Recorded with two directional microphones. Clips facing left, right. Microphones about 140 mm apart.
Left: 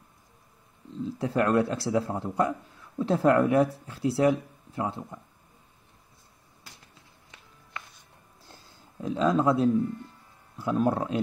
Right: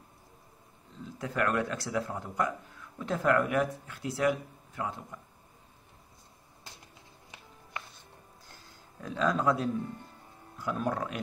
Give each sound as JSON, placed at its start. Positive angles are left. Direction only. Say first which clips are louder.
{"t": 1.0, "sound": "speech", "louder": "left 5 dB", "side_deg": 30}
{"t": 9.0, "sound": "speech", "louder": "left 4 dB", "side_deg": 25}